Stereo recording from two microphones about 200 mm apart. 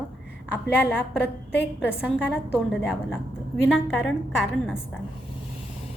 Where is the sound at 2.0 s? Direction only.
Centre (ahead or behind).